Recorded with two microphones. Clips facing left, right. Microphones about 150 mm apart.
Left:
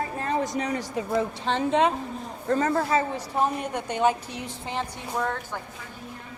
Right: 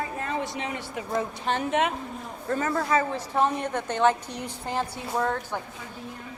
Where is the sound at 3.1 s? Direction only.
10° left (ahead or behind).